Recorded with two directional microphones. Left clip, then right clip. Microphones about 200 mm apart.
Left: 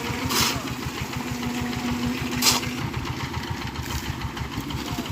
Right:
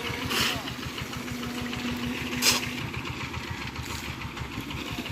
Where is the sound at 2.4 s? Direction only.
35° left (ahead or behind).